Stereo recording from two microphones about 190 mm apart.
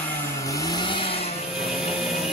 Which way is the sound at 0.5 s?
15° left (ahead or behind).